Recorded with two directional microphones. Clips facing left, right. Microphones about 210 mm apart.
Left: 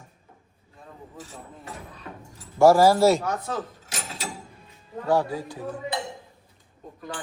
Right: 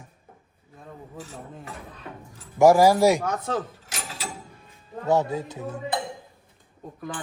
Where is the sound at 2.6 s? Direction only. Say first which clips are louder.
Even; 15° right (ahead or behind).